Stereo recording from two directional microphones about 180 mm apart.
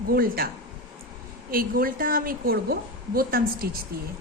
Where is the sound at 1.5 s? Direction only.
55° right (ahead or behind).